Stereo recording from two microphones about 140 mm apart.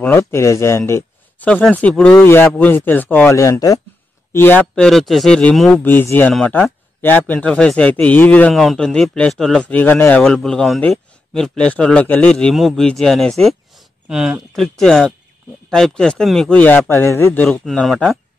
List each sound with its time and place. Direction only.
0.0 s a man's voice: 15° left (ahead or behind)
5.9 s a man's voice: 15° left (ahead or behind)
17.5 s a man's voice: 5° left (ahead or behind)